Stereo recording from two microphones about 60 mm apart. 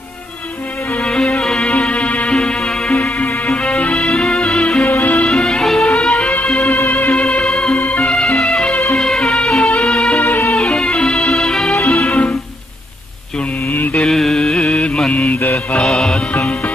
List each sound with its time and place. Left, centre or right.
1.0 s music: centre
3.0 s music: left
4.8 s music: left
5.3 s music: centre
6.8 s music: left
7.2 s music: centre
7.7 s music: left
8.1 s music: centre
10.2 s music: left
10.5 s music: centre
14.0 s mantra: centre; by 15.3 s left
15.8 s music: centre
16.3 s music: left